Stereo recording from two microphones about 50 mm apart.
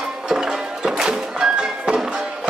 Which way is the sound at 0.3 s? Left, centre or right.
Centre.